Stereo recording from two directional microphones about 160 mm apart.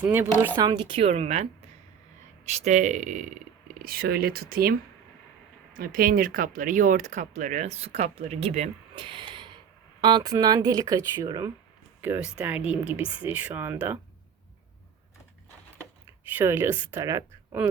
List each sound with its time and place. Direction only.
0.0 s speech: 10° right (ahead or behind)
0.5 s a woman's voice: 25° right (ahead or behind); by 3.2 s 50° right (ahead or behind)
3.8 s speech: 65° right (ahead or behind)
5.7 s speech: 65° right (ahead or behind); by 14.0 s 10° right (ahead or behind)
16.3 s speech: 15° right (ahead or behind)